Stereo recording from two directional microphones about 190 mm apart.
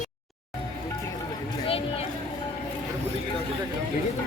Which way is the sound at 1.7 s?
30° left (ahead or behind).